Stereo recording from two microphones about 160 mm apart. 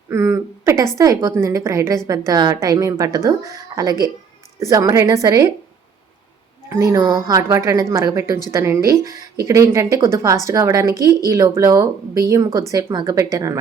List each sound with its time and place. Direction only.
0.1 s a sound: 15° right (ahead or behind)
0.9 s speech: 20° right (ahead or behind)
6.7 s speech: 20° right (ahead or behind)